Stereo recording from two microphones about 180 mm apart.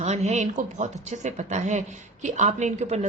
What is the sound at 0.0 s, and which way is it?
A woman's voice, 40° right (ahead or behind).